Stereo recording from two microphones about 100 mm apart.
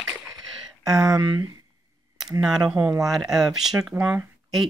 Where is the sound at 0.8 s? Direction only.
35° right (ahead or behind).